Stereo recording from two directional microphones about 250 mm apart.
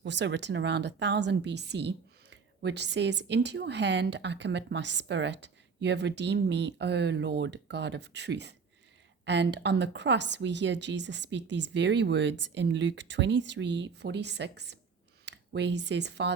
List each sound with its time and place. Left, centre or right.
0.0 s a woman's voice: right